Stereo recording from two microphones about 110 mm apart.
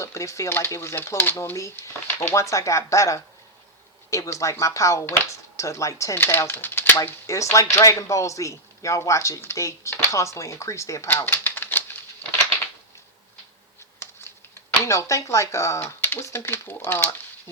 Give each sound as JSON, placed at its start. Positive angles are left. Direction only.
{"t": 0.0, "sound": "speech", "side_deg": 25}
{"t": 14.8, "sound": "speech", "side_deg": 30}